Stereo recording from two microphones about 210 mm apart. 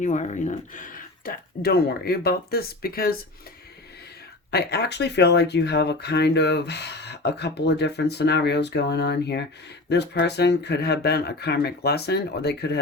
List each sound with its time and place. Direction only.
0.0 s speech: 35° left (ahead or behind)
4.5 s speech: 50° left (ahead or behind)